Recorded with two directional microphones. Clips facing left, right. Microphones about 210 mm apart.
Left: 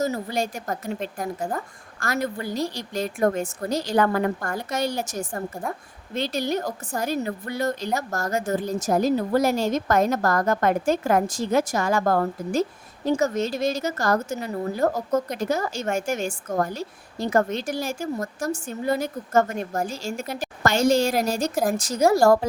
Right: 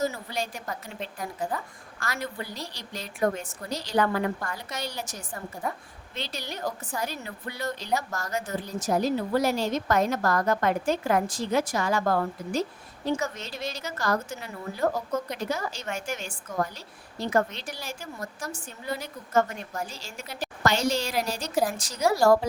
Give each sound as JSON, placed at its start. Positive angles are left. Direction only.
{"t": 0.0, "sound": "a woman's voice", "side_deg": 45}